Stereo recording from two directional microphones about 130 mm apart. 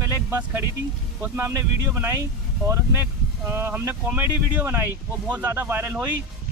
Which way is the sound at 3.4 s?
20° right (ahead or behind).